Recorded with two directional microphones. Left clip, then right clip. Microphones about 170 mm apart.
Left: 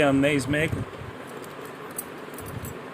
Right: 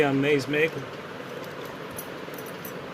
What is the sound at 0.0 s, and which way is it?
Speech, 65° left (ahead or behind).